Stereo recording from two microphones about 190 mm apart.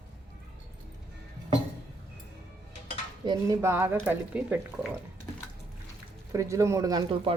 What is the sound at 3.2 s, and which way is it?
Speech, 20° right (ahead or behind).